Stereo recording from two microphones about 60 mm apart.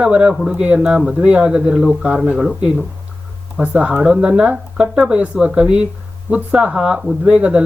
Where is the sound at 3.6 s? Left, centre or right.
Right.